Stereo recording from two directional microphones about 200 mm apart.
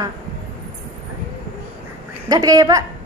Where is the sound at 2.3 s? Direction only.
20° right (ahead or behind).